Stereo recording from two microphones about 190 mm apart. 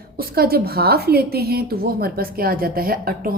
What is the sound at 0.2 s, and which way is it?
Speech, 50° right (ahead or behind).